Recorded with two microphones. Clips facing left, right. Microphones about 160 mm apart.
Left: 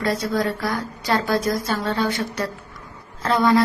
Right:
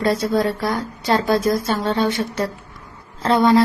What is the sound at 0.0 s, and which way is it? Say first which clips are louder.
Speech: right 4 dB; 30° right (ahead or behind).